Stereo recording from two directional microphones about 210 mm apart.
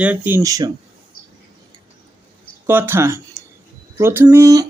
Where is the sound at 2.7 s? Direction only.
10° right (ahead or behind).